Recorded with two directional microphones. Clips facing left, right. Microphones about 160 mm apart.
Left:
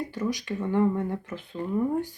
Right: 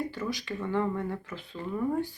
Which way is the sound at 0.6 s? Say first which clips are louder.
Left 5 dB; 15° left (ahead or behind).